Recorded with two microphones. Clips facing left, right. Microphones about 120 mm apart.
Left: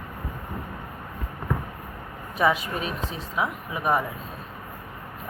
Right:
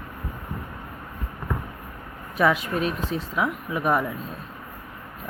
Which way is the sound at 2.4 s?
Centre (ahead or behind).